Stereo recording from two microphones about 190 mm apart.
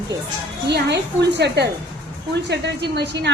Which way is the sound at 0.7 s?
65° right (ahead or behind).